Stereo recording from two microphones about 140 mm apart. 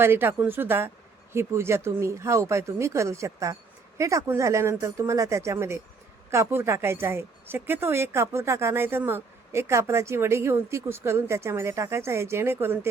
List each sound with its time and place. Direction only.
0.0 s a woman's voice: 15° right (ahead or behind)